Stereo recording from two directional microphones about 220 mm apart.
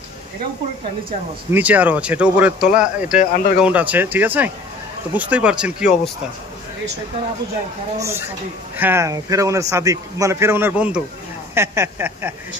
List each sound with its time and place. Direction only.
1.5 s a man's voice: 5° right (ahead or behind)
3.2 s speech: 35° left (ahead or behind)
3.6 s a man's voice: 5° right (ahead or behind)
8.0 s a man's voice: 10° right (ahead or behind)